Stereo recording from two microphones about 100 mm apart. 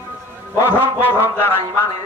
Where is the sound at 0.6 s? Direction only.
20° left (ahead or behind).